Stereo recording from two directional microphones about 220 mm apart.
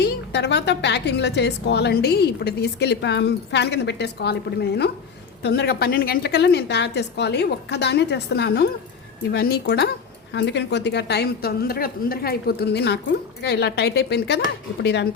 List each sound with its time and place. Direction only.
0.0 s a woman's voice: 50° left (ahead or behind)